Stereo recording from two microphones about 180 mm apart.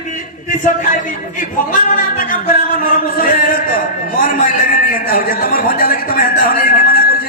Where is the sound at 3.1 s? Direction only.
50° left (ahead or behind).